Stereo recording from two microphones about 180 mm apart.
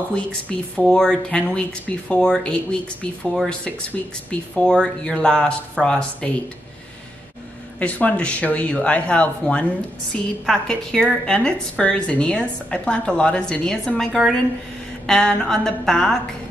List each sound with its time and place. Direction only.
0.1 s a woman's voice: 5° left (ahead or behind)
7.8 s a woman's voice: 5° left (ahead or behind)